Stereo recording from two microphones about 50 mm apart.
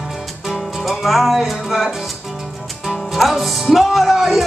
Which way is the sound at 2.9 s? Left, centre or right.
Centre.